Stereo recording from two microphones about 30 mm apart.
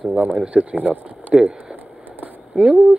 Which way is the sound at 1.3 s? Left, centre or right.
Right.